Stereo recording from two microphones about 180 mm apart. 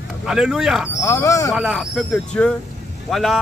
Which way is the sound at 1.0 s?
15° left (ahead or behind).